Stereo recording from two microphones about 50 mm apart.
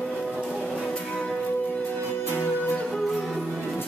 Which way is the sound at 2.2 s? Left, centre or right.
Left.